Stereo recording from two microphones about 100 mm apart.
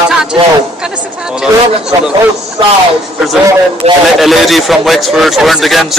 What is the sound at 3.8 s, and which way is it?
Speech, 90° right.